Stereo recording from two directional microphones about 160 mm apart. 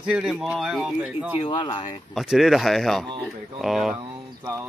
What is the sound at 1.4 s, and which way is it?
Speech, 30° left (ahead or behind).